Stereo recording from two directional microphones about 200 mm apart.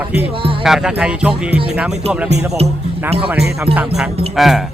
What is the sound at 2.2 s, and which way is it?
Speech, 35° right (ahead or behind).